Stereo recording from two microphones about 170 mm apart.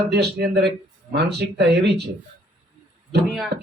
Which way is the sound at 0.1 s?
75° right (ahead or behind).